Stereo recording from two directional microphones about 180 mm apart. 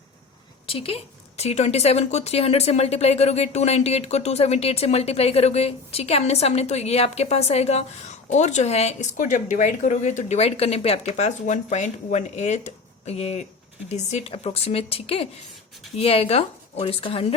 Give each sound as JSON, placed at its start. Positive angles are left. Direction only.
{"t": 0.7, "sound": "speech", "side_deg": 30}